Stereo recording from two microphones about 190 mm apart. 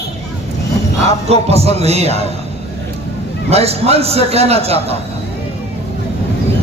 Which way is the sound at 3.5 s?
35° right (ahead or behind).